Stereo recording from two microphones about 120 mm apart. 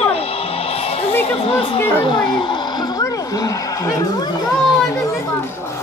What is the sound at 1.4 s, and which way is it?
Speech, 50° left (ahead or behind).